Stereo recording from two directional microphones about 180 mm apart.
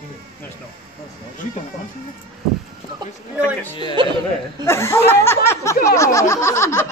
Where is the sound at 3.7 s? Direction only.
25° left (ahead or behind).